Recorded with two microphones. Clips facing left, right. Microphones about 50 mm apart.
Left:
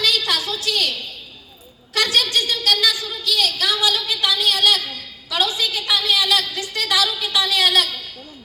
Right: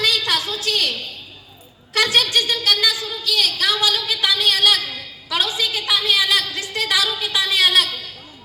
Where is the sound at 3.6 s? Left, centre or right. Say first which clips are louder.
Even; right.